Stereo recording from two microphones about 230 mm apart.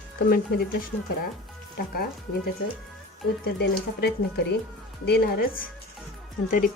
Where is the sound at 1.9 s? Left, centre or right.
Left.